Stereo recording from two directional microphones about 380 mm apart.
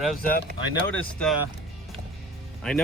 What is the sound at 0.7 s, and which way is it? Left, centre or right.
Speech, centre.